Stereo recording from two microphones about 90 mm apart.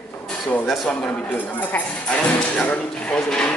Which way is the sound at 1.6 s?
20° left (ahead or behind).